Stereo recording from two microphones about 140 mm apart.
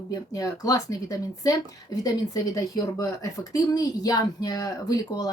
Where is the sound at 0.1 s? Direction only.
25° left (ahead or behind).